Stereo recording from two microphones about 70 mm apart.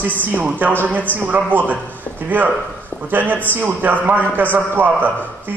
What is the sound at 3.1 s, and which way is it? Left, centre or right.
A man's voice, right.